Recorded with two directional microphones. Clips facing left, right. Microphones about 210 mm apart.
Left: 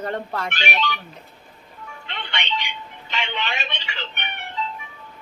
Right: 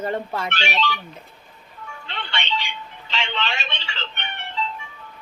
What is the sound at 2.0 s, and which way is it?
Telephone, 20° left (ahead or behind).